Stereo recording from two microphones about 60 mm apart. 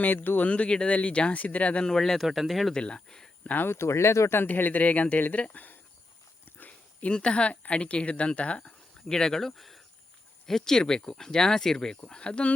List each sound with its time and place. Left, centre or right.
0.0 s speech: left
0.5 s speech: centre
1.9 s speech: centre
2.2 s speech: centre
2.7 s speech: centre
3.5 s speech: left
3.8 s speech: left
4.4 s speech: left
6.7 s speech: centre